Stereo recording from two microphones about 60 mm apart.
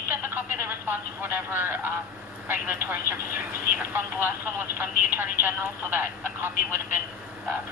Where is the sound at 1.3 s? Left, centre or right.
Right.